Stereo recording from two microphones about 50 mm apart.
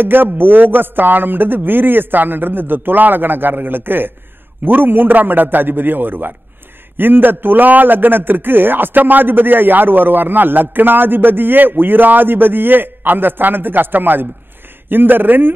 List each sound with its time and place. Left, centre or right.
0.0 s a man's voice: right